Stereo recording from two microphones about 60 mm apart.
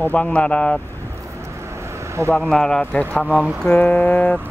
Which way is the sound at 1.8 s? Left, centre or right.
Right.